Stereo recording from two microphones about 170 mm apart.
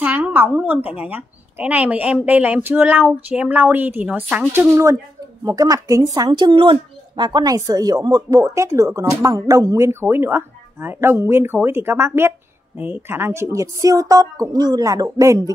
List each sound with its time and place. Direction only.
0.0 s a woman's voice: 10° right (ahead or behind)